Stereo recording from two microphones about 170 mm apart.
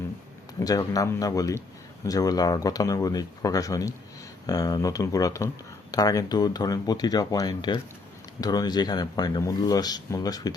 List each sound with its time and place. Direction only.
0.6 s speech: 20° left (ahead or behind)